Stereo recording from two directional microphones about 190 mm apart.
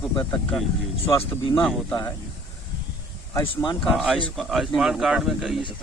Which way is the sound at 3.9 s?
Centre (ahead or behind).